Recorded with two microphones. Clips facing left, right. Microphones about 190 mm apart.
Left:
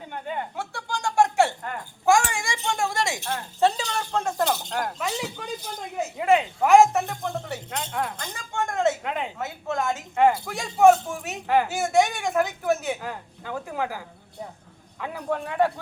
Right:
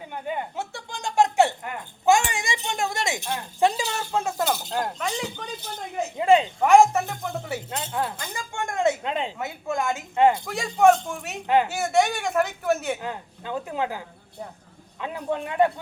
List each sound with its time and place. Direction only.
0.1 s a sound: 15° right (ahead or behind)
4.7 s speech: 25° right (ahead or behind)
4.9 s speech: 5° left (ahead or behind)
6.1 s speech: 30° right (ahead or behind)
6.6 s a woman's voice: centre (ahead or behind)
8.1 s a sound: 10° right (ahead or behind)
9.0 s a sound: 25° right (ahead or behind)
9.4 s speech: 10° right (ahead or behind)
10.2 s speech: 20° right (ahead or behind)
10.4 s speech: centre (ahead or behind)
11.4 s speech: 20° right (ahead or behind)
11.7 s speech: centre (ahead or behind)
13.0 s speech: 20° right (ahead or behind)